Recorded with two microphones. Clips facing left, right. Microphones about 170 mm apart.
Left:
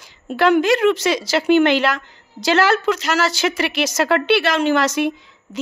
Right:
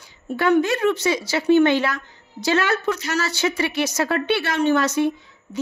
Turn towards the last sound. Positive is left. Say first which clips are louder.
# left 1 dB
turn(degrees=90)